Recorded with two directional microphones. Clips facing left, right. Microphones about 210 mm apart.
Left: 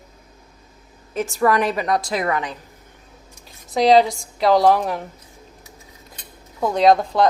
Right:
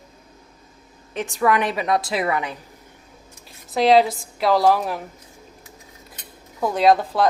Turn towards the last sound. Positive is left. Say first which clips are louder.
# left 2 dB
turn(degrees=-5)  # may be behind; listen again after turning